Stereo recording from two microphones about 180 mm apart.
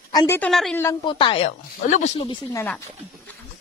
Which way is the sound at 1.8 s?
40° left (ahead or behind).